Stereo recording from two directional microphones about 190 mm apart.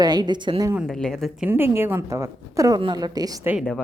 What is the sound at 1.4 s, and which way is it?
Speech, 10° right (ahead or behind).